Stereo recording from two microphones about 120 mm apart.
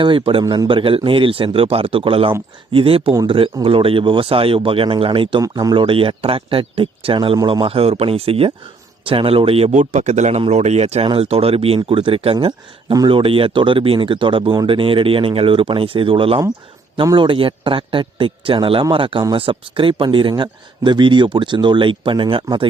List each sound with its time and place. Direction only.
0.0 s speech: 45° right (ahead or behind)
0.4 s speech: 35° right (ahead or behind)
0.7 s speech: 45° right (ahead or behind)
5.4 s speech: 30° right (ahead or behind)
5.7 s speech: 45° right (ahead or behind)
7.3 s a man's voice: 35° right (ahead or behind); by 11.0 s 65° right (ahead or behind)
11.0 s speech: 50° right (ahead or behind)